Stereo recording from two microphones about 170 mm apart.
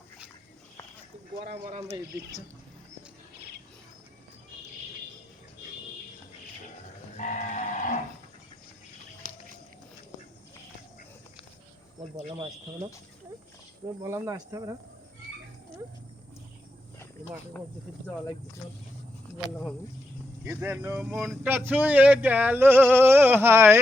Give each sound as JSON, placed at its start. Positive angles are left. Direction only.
{"t": 7.2, "sound": "livestock", "side_deg": 45}
{"t": 12.1, "sound": "speech", "side_deg": -30}
{"t": 14.0, "sound": "speech", "side_deg": -15}
{"t": 20.4, "sound": "speech", "side_deg": -15}